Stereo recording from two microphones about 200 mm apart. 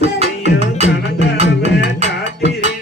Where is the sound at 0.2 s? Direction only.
35° right (ahead or behind).